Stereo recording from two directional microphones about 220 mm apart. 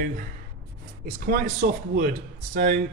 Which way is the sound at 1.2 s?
40° right (ahead or behind).